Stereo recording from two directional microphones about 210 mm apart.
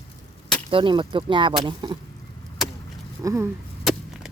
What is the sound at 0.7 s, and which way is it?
Speech, 25° right (ahead or behind).